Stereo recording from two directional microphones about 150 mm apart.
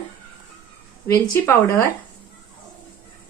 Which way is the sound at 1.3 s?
15° left (ahead or behind).